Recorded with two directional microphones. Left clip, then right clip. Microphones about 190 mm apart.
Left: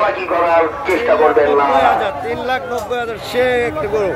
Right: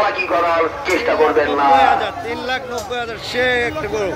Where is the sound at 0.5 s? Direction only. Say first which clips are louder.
Left 3 dB; 25° right (ahead or behind).